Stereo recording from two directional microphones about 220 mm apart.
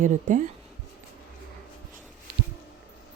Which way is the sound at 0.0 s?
35° right (ahead or behind).